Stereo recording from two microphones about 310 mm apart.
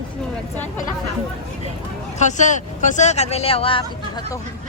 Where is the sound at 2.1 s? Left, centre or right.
Left.